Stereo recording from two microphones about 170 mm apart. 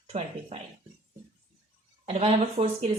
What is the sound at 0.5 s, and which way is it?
Speech, 40° right (ahead or behind).